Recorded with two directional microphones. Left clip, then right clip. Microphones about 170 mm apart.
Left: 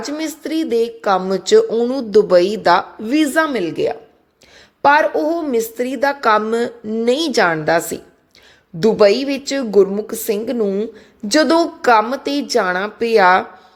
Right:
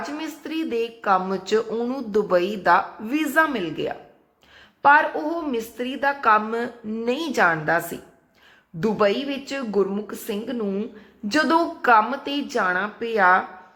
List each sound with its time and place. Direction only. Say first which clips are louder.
0.0 s a woman's voice: left 7 dB; 30° left (ahead or behind); by 13.4 s 45° left (ahead or behind)